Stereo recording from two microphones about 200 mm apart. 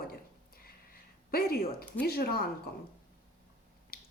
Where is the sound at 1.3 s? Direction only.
50° left (ahead or behind).